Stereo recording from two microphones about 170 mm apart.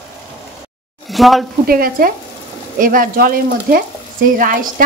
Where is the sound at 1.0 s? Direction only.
Centre (ahead or behind).